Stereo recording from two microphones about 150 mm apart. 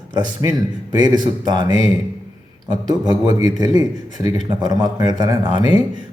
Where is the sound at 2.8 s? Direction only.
25° right (ahead or behind).